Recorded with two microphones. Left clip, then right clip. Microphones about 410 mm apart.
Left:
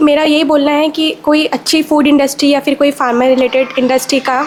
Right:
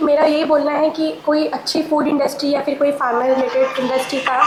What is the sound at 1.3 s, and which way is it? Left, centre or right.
A woman's voice, left.